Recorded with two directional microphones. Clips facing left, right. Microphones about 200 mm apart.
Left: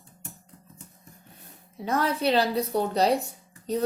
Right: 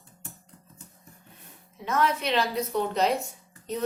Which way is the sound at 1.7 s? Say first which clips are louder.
Even; 35° left (ahead or behind).